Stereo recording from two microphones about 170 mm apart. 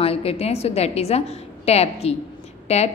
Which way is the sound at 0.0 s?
35° left (ahead or behind).